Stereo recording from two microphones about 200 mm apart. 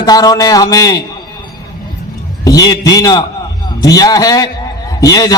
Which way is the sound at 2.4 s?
20° left (ahead or behind).